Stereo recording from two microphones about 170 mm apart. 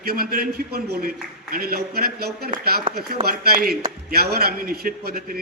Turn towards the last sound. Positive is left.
turn(degrees=-60)  # may be behind; listen again after turning